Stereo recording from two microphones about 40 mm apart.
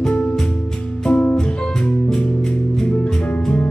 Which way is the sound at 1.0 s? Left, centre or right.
Left.